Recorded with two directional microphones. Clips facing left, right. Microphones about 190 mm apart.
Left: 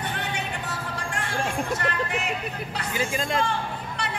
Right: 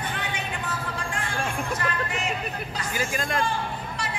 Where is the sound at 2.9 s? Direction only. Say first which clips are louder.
Left 1 dB; 25° left (ahead or behind).